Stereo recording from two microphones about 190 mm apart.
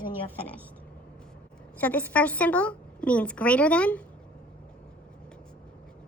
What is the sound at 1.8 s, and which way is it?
A woman's voice, 10° left (ahead or behind).